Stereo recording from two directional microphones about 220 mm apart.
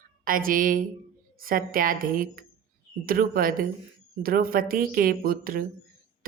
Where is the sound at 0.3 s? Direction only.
40° right (ahead or behind).